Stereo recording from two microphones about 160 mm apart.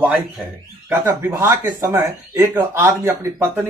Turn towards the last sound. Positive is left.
turn(degrees=-15)  # may be behind; listen again after turning